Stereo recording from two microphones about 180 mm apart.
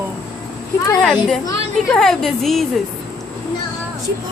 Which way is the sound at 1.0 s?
5° left (ahead or behind).